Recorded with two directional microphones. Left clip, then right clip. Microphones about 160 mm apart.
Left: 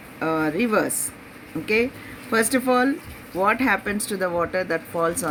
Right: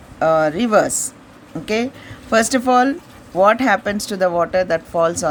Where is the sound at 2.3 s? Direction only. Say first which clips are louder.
Right 6 dB; 70° right (ahead or behind).